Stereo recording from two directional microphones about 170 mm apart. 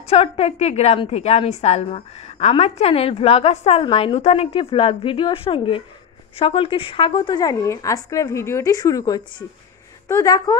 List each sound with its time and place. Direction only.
0.0 s a woman's voice: 35° left (ahead or behind); by 10.6 s 20° left (ahead or behind)